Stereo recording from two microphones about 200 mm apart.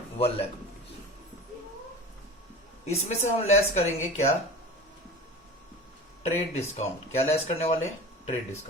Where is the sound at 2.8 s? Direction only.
35° left (ahead or behind).